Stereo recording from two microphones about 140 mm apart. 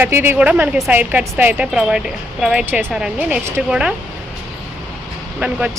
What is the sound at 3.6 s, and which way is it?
Speech, 5° right (ahead or behind).